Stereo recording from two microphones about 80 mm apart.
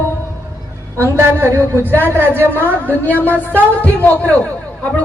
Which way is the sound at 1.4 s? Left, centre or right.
Right.